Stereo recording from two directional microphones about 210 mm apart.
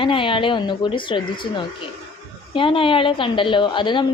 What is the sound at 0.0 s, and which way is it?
A woman's voice, 25° left (ahead or behind).